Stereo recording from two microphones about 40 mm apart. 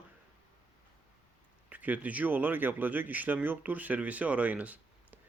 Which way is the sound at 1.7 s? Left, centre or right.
Right.